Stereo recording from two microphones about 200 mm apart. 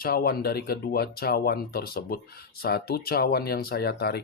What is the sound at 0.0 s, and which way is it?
Speech, 50° left (ahead or behind).